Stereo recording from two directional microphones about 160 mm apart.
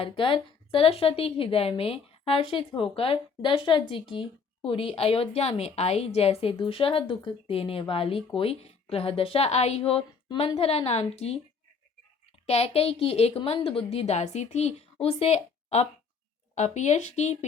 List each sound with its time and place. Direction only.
0.0 s a woman's voice: 35° left (ahead or behind)
12.5 s a woman's voice: 40° left (ahead or behind)